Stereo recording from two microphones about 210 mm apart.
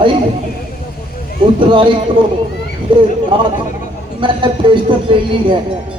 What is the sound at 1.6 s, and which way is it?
Speech, 25° right (ahead or behind).